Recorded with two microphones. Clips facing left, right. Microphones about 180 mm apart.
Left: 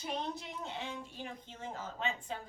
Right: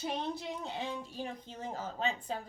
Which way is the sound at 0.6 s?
35° right (ahead or behind).